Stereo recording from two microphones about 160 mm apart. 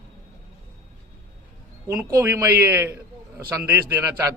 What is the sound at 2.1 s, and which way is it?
A man's voice, 15° right (ahead or behind).